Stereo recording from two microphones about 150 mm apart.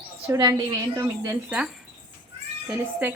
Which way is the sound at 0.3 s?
25° right (ahead or behind).